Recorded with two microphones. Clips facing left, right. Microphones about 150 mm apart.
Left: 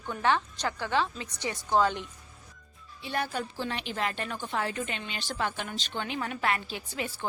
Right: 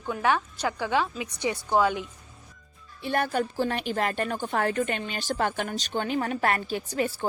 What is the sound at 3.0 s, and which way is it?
A woman's voice, 55° right (ahead or behind).